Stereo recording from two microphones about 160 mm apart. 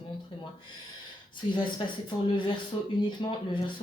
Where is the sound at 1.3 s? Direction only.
30° left (ahead or behind).